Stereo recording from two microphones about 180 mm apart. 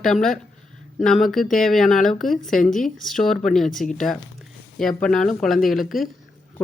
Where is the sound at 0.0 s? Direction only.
Centre (ahead or behind).